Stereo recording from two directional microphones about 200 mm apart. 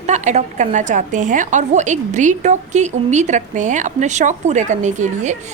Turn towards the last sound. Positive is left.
turn(degrees=-35)  # may be behind; listen again after turning